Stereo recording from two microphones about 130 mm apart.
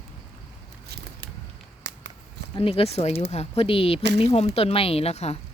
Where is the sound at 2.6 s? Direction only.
50° left (ahead or behind).